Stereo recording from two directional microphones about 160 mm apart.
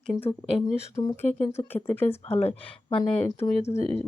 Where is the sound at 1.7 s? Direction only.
15° left (ahead or behind).